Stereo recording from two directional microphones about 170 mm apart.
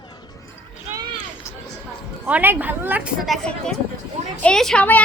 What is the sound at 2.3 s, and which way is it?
Speech, 10° right (ahead or behind).